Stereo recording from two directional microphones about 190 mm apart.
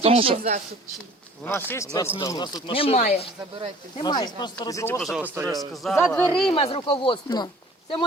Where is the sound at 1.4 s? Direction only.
15° left (ahead or behind); by 3.0 s 30° left (ahead or behind).